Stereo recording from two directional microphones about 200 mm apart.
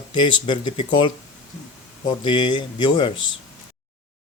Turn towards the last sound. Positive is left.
turn(degrees=25)  # may be behind; listen again after turning